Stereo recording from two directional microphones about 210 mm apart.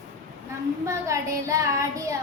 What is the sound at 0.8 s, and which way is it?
A woman's voice, 15° right (ahead or behind).